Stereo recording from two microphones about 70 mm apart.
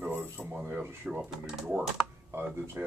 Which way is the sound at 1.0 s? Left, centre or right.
Centre.